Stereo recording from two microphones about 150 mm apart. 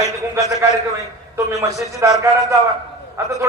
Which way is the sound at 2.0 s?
20° right (ahead or behind).